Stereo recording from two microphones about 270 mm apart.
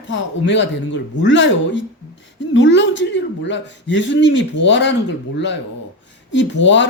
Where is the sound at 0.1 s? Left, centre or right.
Left.